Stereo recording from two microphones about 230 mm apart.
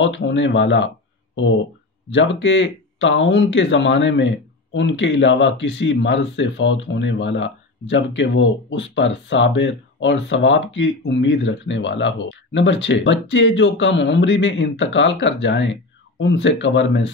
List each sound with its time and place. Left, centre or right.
0.0 s speech: left
2.0 s speech: left